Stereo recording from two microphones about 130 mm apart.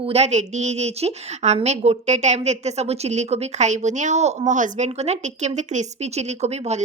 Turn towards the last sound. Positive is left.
turn(degrees=-60)  # may be behind; listen again after turning